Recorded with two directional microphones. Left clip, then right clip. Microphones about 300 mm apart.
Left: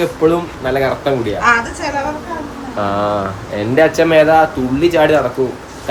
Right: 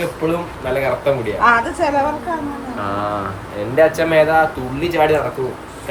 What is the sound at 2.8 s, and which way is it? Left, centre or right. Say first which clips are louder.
Speech: left 6 dB; centre.